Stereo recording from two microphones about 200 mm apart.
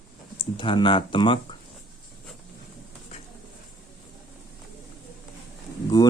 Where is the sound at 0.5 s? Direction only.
25° left (ahead or behind).